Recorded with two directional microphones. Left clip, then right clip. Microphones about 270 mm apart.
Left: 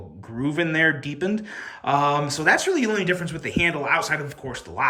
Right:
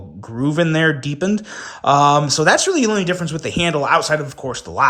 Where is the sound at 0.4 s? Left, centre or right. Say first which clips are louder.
Right 4 dB; centre.